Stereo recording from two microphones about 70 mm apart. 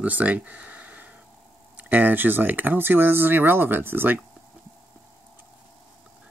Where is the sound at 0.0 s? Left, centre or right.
Right.